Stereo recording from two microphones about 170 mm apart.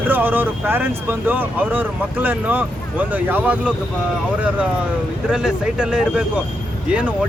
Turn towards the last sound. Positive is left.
turn(degrees=-5)  # may be behind; listen again after turning